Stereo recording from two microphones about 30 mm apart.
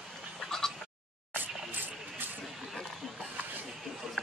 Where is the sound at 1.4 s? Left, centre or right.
Right.